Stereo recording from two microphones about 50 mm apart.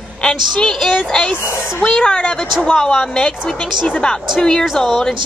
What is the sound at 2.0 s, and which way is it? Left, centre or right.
A woman's voice, centre.